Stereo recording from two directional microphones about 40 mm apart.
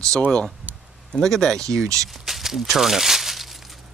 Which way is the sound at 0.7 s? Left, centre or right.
Right.